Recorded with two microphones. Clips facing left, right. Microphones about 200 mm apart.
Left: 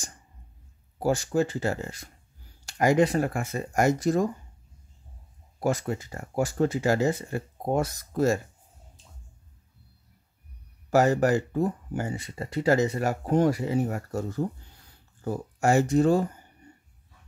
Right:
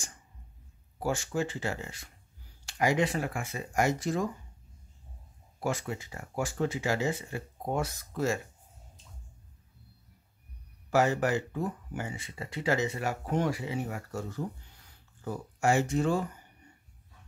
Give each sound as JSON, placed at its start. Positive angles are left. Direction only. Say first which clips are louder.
{"t": 0.9, "sound": "speech", "louder": "left 6 dB", "side_deg": 40}
{"t": 5.6, "sound": "speech", "louder": "left 6 dB", "side_deg": 40}
{"t": 10.9, "sound": "speech", "louder": "left 5 dB", "side_deg": 40}